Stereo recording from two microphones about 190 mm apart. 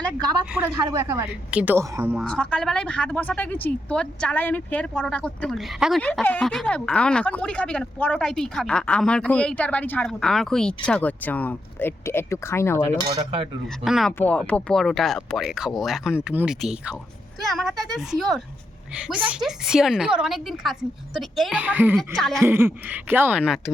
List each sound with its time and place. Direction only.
0.8 s speech: 20° right (ahead or behind)
2.2 s a woman's voice: 5° left (ahead or behind)
13.1 s cutlery: 30° right (ahead or behind)
13.8 s a woman's voice: centre (ahead or behind)
22.4 s speech: 10° right (ahead or behind)